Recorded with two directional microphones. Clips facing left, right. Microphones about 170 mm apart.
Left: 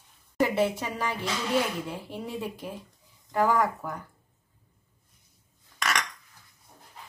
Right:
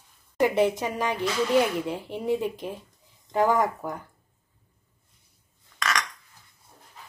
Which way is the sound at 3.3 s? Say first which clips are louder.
Right 2 dB; 20° right (ahead or behind).